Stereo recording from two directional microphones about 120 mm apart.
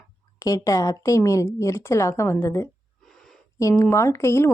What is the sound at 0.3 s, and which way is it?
A woman's voice, 30° left (ahead or behind).